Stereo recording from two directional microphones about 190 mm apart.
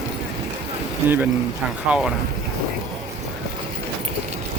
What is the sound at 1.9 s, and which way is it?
Speech, 5° right (ahead or behind).